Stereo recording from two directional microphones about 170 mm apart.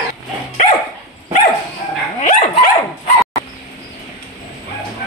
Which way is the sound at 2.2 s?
50° left (ahead or behind).